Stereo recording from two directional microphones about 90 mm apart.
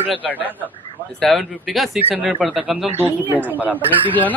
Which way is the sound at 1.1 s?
Centre (ahead or behind).